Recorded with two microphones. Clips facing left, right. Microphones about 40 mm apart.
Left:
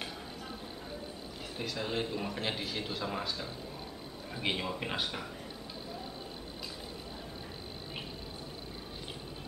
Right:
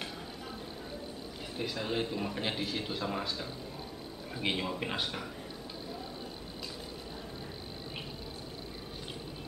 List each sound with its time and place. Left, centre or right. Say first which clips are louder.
1.6 s a man's voice: right 1 dB; centre